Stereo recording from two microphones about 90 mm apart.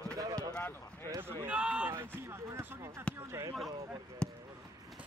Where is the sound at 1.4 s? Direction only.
15° right (ahead or behind).